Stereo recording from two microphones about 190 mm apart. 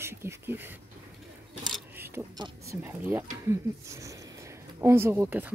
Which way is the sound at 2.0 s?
10° right (ahead or behind).